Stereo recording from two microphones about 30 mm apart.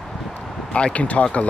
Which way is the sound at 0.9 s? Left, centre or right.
Left.